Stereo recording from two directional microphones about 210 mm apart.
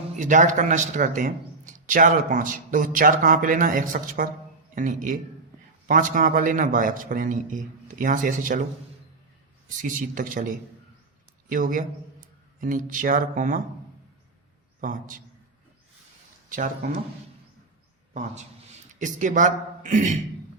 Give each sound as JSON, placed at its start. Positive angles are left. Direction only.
{"t": 0.2, "sound": "a man's voice", "side_deg": -35}
{"t": 9.6, "sound": "a man's voice", "side_deg": -40}
{"t": 14.8, "sound": "a man's voice", "side_deg": -40}
{"t": 16.5, "sound": "a man's voice", "side_deg": -40}
{"t": 18.1, "sound": "a man's voice", "side_deg": -35}